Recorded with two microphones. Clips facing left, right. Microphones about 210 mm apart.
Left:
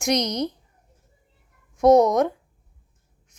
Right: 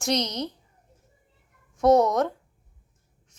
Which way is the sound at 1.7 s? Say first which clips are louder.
Left 3 dB; 15° left (ahead or behind).